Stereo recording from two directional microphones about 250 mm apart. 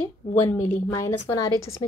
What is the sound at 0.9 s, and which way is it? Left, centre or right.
Speech, centre.